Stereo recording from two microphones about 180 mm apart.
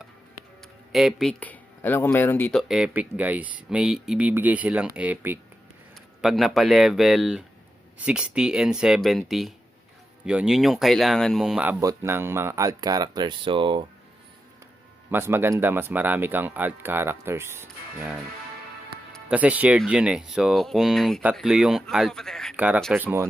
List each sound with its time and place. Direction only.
0.9 s speech: centre (ahead or behind); by 13.8 s 30° right (ahead or behind)
15.1 s speech: 15° right (ahead or behind)
19.3 s speech: 10° right (ahead or behind)
22.5 s speech: 10° right (ahead or behind)